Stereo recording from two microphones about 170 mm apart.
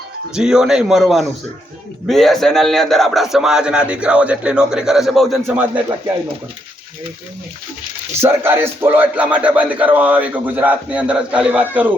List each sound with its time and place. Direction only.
0.3 s a man's voice: 5° right (ahead or behind)
5.5 s speech: 10° right (ahead or behind)
8.2 s speech: 15° right (ahead or behind)